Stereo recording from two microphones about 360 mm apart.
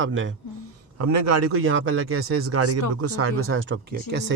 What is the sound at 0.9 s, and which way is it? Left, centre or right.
A man's voice, right.